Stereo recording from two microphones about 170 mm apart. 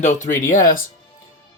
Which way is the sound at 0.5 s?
55° left (ahead or behind).